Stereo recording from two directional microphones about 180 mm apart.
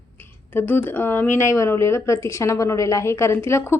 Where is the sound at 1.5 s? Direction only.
15° left (ahead or behind).